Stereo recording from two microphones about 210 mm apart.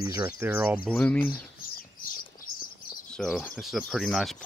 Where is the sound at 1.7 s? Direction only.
40° left (ahead or behind).